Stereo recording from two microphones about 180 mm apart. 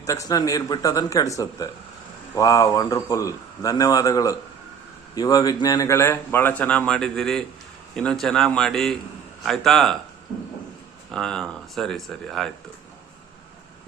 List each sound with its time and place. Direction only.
0.0 s a man's voice: 20° left (ahead or behind); by 9.9 s centre (ahead or behind)
11.1 s speech: 5° left (ahead or behind)